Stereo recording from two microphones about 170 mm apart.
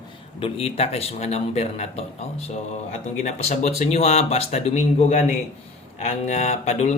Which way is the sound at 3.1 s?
40° left (ahead or behind).